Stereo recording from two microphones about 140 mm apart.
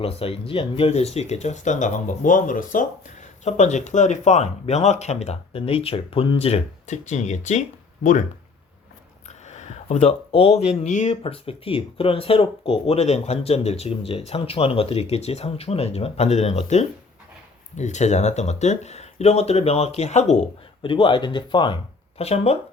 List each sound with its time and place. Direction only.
0.0 s speech: 40° left (ahead or behind); by 3.2 s 70° left (ahead or behind)
3.4 s speech: 55° left (ahead or behind)
9.5 s speech: 55° left (ahead or behind)
20.8 s speech: 35° left (ahead or behind)
22.2 s speech: 45° left (ahead or behind)